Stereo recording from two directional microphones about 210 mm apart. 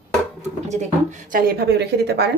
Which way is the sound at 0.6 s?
35° right (ahead or behind).